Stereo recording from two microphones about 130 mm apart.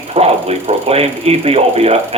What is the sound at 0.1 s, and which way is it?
Speech, 55° right (ahead or behind).